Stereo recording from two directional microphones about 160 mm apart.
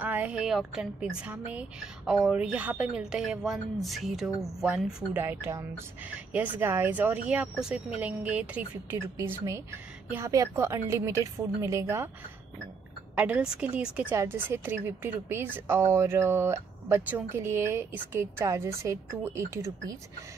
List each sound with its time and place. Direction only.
0.0 s a woman's voice: 10° right (ahead or behind)
10.0 s a woman's voice: 10° right (ahead or behind)
13.1 s a woman's voice: 10° right (ahead or behind)